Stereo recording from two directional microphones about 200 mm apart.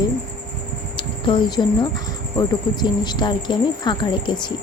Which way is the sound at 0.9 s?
25° left (ahead or behind).